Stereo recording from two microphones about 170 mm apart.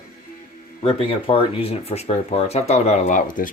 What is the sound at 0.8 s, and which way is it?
Speech, 35° left (ahead or behind).